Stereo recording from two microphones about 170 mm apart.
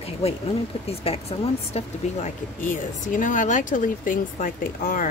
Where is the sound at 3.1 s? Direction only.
50° left (ahead or behind).